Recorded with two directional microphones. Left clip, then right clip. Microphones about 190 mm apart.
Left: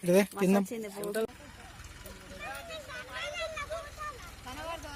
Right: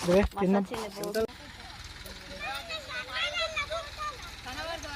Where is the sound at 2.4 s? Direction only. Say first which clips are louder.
Right 5 dB; 20° left (ahead or behind).